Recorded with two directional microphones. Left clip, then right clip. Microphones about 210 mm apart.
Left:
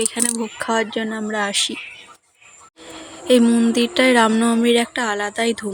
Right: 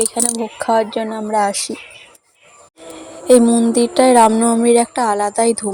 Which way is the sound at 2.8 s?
10° right (ahead or behind).